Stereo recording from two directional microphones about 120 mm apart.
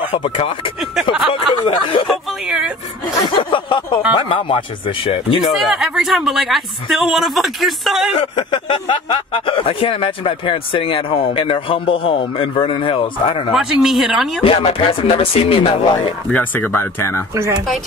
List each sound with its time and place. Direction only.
0.1 s speech: 50° left (ahead or behind)
1.5 s speech: 40° left (ahead or behind)
3.3 s speech: 45° left (ahead or behind)
5.5 s speech: centre (ahead or behind)
8.1 s speech: 45° left (ahead or behind)
13.6 s speech: 5° right (ahead or behind)
14.4 s speech: 50° left (ahead or behind)
16.3 s speech: 15° left (ahead or behind)